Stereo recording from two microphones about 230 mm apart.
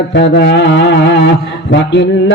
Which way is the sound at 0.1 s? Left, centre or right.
Left.